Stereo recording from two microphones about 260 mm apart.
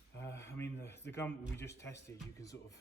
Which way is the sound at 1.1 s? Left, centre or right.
Centre.